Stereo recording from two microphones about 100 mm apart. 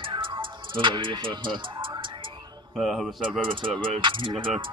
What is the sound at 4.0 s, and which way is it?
Music, 55° right (ahead or behind).